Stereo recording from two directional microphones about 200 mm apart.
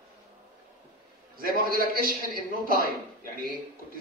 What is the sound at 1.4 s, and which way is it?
Speech, 45° right (ahead or behind).